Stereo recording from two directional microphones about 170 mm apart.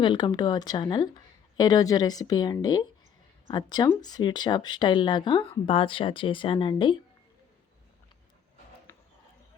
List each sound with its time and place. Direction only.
0.0 s speech: 25° left (ahead or behind)